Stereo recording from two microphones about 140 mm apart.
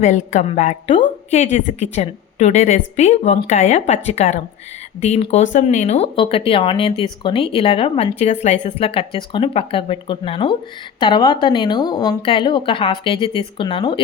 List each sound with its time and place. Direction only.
0.0 s a woman's voice: 60° left (ahead or behind); by 14.0 s 35° left (ahead or behind)